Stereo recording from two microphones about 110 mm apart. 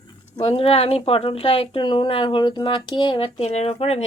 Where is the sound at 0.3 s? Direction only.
65° left (ahead or behind).